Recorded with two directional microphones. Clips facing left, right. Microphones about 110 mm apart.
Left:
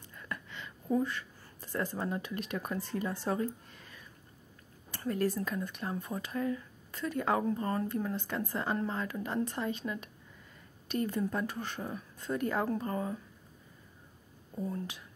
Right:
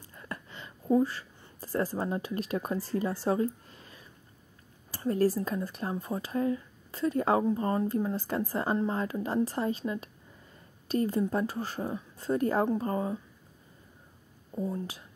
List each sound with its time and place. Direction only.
0.1 s a sound: 30° right (ahead or behind)
1.6 s speech: 35° right (ahead or behind)
14.5 s speech: 30° right (ahead or behind)